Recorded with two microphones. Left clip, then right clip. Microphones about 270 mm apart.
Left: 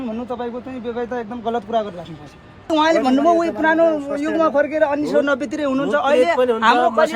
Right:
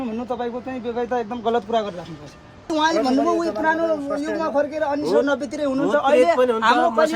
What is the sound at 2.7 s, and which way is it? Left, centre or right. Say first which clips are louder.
A man's voice: left 4 dB; left.